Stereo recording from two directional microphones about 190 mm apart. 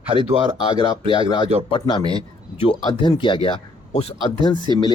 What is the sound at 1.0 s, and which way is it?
Speech, 25° right (ahead or behind).